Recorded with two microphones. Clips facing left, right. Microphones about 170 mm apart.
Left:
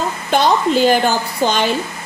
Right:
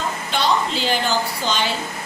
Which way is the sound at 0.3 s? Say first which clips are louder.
Left 7 dB; 50° left (ahead or behind).